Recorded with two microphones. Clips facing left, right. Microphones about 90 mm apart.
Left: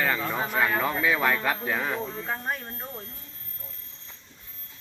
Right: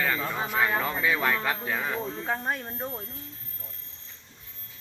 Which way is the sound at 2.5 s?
20° right (ahead or behind).